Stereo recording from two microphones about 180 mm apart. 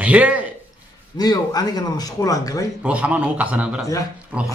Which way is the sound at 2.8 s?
5° right (ahead or behind).